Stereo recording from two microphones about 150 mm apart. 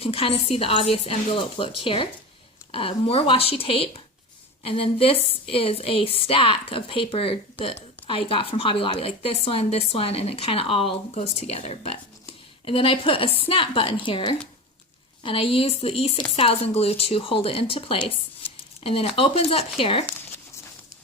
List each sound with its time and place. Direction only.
0.0 s speech: 40° left (ahead or behind)